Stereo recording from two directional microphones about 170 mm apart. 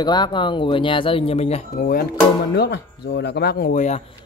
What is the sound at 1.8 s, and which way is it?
Speech, 60° left (ahead or behind).